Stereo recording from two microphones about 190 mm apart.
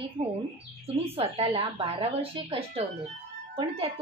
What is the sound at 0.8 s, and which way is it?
A woman's voice, 30° right (ahead or behind).